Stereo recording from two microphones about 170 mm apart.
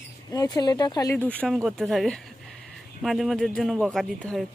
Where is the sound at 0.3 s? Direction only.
20° left (ahead or behind).